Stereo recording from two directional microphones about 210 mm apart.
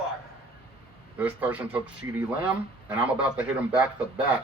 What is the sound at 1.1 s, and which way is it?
Speech, 5° right (ahead or behind).